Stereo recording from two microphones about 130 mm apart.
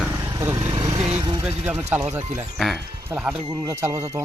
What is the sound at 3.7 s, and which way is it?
Speech, 20° right (ahead or behind).